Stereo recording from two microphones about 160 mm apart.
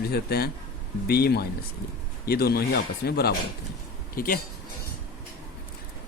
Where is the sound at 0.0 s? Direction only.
75° left (ahead or behind).